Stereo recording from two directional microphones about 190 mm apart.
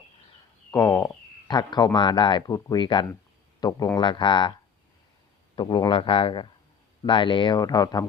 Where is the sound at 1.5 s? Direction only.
20° left (ahead or behind).